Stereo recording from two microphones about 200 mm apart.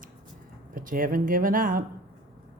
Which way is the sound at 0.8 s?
45° right (ahead or behind).